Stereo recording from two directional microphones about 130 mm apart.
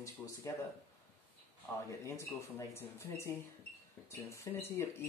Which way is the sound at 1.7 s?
20° left (ahead or behind).